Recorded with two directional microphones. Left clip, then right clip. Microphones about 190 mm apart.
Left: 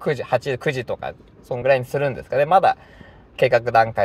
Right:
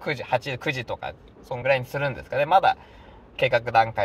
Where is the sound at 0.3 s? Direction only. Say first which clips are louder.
Left 2 dB; 35° left (ahead or behind).